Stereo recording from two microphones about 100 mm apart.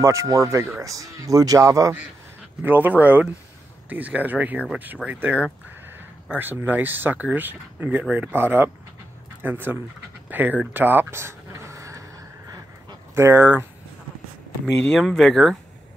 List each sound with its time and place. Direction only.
0.0 s speech: 30° right (ahead or behind)
2.6 s speech: 20° right (ahead or behind)
10.7 s a sound: 20° right (ahead or behind)
13.1 s speech: 25° right (ahead or behind)
14.8 s speech: 5° left (ahead or behind)